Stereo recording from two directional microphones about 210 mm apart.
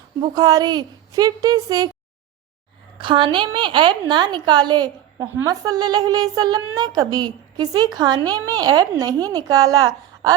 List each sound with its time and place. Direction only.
0.2 s a woman's voice: 20° right (ahead or behind)
3.0 s a woman's voice: 25° right (ahead or behind)